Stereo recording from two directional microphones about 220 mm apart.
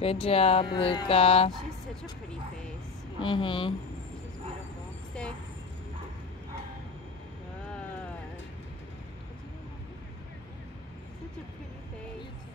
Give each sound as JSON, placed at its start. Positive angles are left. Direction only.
{"t": 0.0, "sound": "speech", "side_deg": 25}
{"t": 3.2, "sound": "speech", "side_deg": 20}